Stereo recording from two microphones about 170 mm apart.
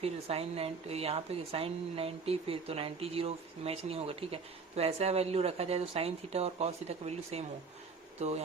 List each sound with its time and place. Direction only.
0.0 s a woman's voice: 35° right (ahead or behind)